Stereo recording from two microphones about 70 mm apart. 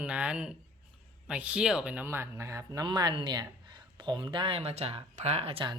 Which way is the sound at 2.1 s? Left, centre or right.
Right.